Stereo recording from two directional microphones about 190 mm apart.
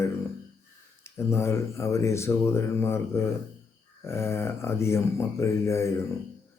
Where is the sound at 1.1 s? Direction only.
15° left (ahead or behind).